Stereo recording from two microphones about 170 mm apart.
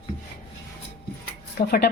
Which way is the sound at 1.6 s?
65° left (ahead or behind).